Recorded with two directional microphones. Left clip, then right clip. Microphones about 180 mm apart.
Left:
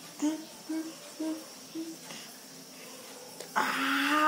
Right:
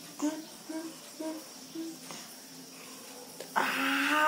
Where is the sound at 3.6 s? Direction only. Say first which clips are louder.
Even; 20° left (ahead or behind).